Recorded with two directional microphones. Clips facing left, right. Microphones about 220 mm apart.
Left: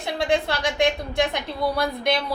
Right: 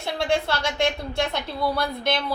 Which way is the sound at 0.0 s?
15° left (ahead or behind).